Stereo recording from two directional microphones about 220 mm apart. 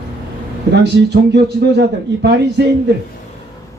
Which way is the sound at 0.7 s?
50° right (ahead or behind).